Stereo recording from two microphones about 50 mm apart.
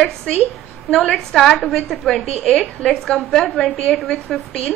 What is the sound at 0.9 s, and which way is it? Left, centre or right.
A woman's voice, centre.